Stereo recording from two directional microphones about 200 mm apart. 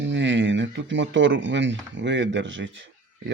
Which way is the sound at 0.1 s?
65° right (ahead or behind).